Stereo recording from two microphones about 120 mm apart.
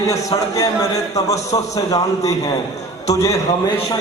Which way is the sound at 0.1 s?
30° left (ahead or behind).